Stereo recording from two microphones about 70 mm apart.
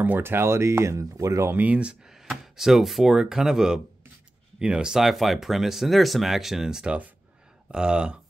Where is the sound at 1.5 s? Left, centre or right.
Right.